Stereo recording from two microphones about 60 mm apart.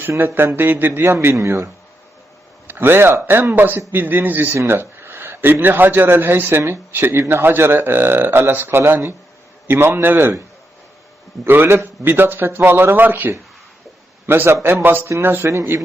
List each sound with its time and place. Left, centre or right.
0.3 s speech: right
1.4 s speech: right
2.6 s a man's voice: right
4.5 s a man's voice: right
11.4 s speech: right
15.7 s a man's voice: right